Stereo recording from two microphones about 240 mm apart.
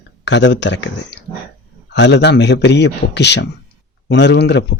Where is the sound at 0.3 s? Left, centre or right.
Left.